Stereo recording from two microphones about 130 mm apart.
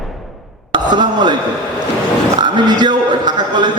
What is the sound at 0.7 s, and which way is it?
Chopping, 35° right (ahead or behind).